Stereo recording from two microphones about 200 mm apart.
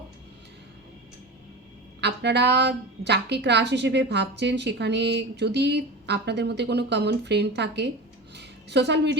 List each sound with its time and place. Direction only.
2.0 s a woman's voice: 55° right (ahead or behind)